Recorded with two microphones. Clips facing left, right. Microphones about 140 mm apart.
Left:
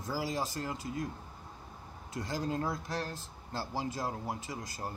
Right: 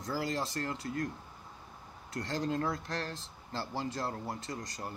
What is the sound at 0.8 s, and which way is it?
Speech, 75° right (ahead or behind).